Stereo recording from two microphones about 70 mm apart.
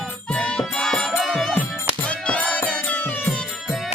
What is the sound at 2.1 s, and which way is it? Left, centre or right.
Music, centre.